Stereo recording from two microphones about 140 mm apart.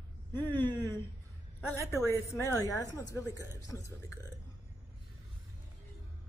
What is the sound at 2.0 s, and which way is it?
A woman's voice, 20° left (ahead or behind).